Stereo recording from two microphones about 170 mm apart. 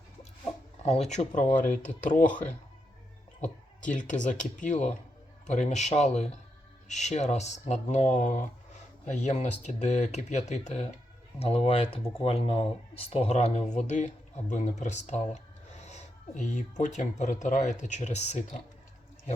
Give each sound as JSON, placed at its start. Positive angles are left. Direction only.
{"t": 0.9, "sound": "speech", "side_deg": 40}
{"t": 3.8, "sound": "speech", "side_deg": 45}